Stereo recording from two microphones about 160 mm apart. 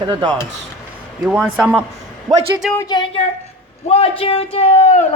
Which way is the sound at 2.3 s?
25° right (ahead or behind).